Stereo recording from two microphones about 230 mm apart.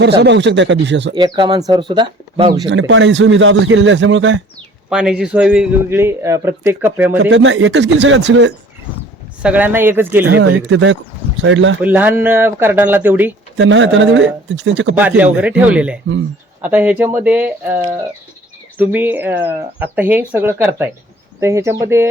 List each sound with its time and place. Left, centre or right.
0.0 s a man's voice: right
1.1 s speech: centre
2.6 s a man's voice: right
4.9 s speech: centre
7.2 s a man's voice: right
9.4 s speech: centre
10.2 s a man's voice: right
11.8 s speech: centre
13.6 s a man's voice: right
14.9 s speech: centre